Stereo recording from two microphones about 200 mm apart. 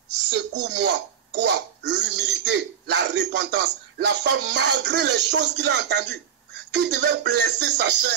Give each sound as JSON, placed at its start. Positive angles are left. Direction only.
{"t": 0.3, "sound": "speech", "side_deg": -60}